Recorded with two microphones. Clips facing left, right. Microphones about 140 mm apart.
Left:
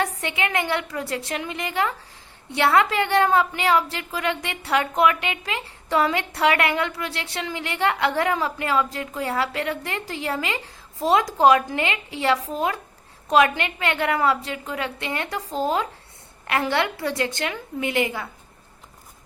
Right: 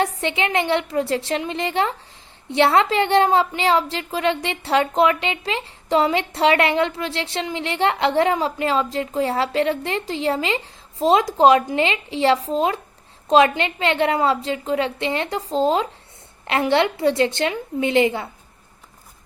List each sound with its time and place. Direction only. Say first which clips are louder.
0.0 s a woman's voice: right 4 dB; 25° right (ahead or behind)